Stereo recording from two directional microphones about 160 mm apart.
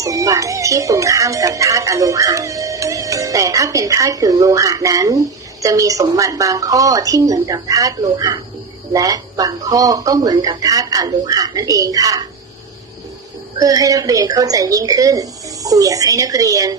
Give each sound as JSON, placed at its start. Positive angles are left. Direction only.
{"t": 0.0, "sound": "speech", "side_deg": -20}
{"t": 13.6, "sound": "speech", "side_deg": -20}